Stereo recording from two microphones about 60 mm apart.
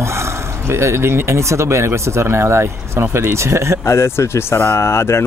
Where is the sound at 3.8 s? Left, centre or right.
Left.